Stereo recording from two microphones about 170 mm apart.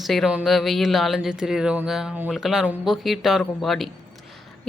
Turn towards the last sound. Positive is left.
turn(degrees=0)  # may be behind; listen again after turning